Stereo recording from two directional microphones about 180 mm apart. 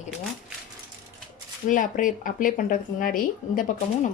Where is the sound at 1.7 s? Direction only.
45° left (ahead or behind).